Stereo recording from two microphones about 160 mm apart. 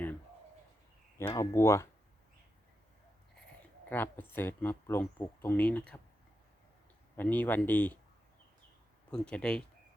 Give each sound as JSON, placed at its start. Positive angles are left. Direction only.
{"t": 1.2, "sound": "speech", "side_deg": 20}
{"t": 3.8, "sound": "speech", "side_deg": 10}
{"t": 7.2, "sound": "speech", "side_deg": 10}
{"t": 9.0, "sound": "speech", "side_deg": 5}